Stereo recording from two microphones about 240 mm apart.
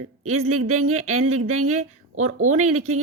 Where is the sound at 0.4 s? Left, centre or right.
Right.